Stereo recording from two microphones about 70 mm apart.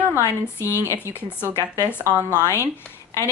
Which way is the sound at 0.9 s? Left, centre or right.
Left.